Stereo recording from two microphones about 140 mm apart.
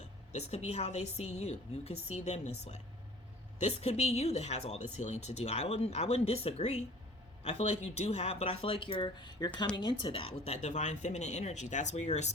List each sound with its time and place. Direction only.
0.3 s speech: 50° left (ahead or behind)